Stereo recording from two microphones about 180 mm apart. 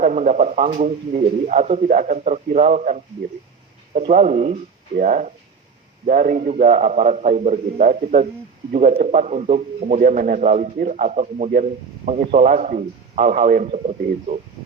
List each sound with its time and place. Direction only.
0.0 s a man's voice: 45° right (ahead or behind)
4.1 s a man's voice: 40° right (ahead or behind)